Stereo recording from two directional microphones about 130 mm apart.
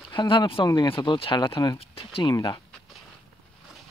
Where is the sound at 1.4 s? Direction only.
25° left (ahead or behind).